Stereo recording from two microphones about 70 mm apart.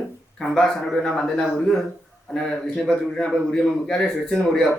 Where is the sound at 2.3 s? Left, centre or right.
Centre.